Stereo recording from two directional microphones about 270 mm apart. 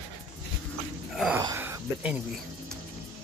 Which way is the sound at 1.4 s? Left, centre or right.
Centre.